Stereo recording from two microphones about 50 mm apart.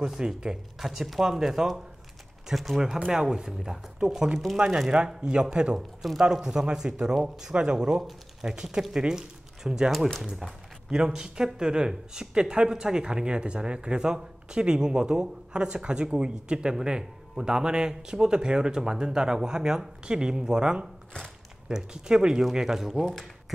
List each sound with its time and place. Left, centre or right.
0.0 s speech: centre
3.1 s speech: centre